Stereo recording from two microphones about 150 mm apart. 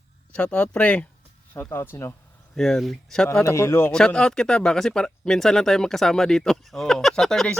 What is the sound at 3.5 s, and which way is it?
Speech, 20° left (ahead or behind).